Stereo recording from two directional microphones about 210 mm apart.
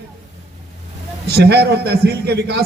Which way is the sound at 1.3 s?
50° right (ahead or behind).